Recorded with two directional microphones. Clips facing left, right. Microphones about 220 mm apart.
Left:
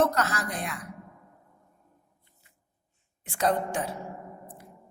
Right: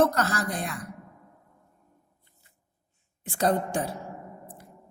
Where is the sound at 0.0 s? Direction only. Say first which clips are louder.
Right 2 dB; 35° right (ahead or behind).